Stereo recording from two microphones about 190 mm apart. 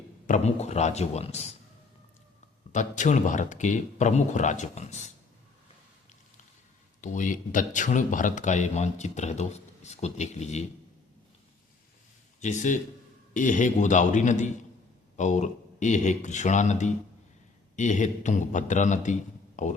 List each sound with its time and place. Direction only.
0.3 s speech: 35° left (ahead or behind)
2.7 s speech: 40° left (ahead or behind)
7.0 s speech: 40° left (ahead or behind)
12.4 s speech: 40° left (ahead or behind)